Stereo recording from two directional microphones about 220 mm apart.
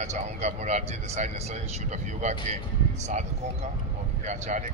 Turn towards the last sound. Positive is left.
turn(degrees=-30)  # may be behind; listen again after turning